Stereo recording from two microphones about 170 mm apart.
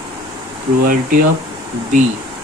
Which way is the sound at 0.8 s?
55° right (ahead or behind).